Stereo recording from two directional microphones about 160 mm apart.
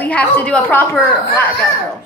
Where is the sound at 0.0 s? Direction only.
10° left (ahead or behind).